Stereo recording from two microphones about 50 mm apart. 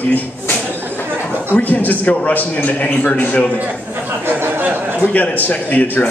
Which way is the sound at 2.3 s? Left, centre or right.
Left.